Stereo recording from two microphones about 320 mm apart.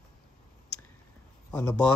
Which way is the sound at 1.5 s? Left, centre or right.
Centre.